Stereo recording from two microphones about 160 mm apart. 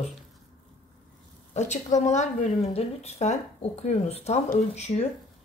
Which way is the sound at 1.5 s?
45° left (ahead or behind).